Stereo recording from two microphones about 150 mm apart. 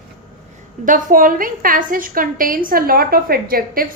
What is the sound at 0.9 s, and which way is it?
A woman's voice, 60° right (ahead or behind).